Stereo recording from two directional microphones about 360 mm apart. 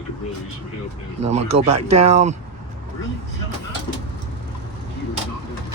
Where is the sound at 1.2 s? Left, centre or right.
Centre.